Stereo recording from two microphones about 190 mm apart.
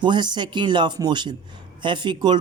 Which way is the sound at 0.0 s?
25° right (ahead or behind).